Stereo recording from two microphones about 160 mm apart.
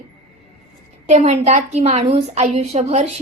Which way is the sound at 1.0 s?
45° right (ahead or behind).